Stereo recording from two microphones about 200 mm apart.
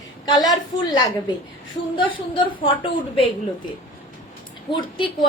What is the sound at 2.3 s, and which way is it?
Speech, 25° left (ahead or behind).